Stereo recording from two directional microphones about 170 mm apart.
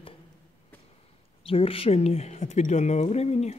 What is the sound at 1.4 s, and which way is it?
Speech, 35° left (ahead or behind).